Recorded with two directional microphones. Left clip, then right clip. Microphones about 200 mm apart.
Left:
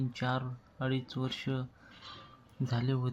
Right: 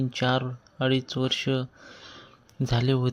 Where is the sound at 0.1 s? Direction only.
40° right (ahead or behind).